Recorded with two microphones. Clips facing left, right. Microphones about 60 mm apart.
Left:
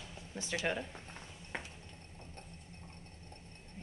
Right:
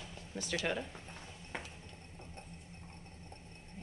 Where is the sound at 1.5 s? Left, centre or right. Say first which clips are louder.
Left 1 dB; centre.